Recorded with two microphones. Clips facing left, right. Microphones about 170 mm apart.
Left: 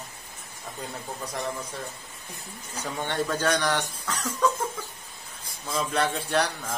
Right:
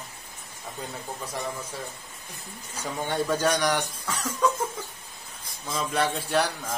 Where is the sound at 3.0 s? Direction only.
10° right (ahead or behind).